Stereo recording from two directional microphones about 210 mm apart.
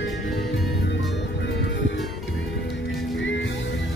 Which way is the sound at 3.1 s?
60° left (ahead or behind).